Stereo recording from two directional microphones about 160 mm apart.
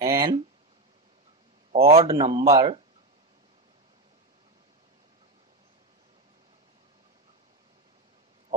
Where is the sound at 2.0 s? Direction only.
30° right (ahead or behind).